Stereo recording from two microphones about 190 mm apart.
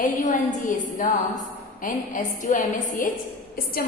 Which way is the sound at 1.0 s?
45° left (ahead or behind).